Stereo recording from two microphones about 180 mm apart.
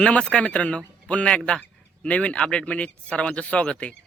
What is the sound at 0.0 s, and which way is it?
A man's voice, 5° left (ahead or behind).